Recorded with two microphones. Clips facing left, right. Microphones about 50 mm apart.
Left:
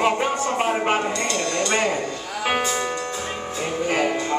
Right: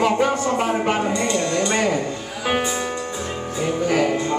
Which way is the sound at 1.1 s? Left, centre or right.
Centre.